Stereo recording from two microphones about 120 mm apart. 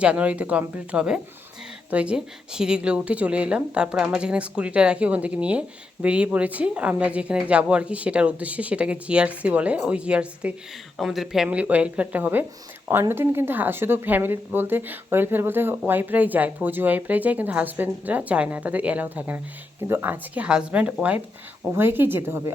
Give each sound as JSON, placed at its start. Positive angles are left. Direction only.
{"t": 0.0, "sound": "a woman's voice", "side_deg": -10}